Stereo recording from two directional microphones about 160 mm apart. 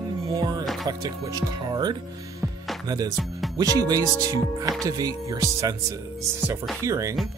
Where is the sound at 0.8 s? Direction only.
25° right (ahead or behind).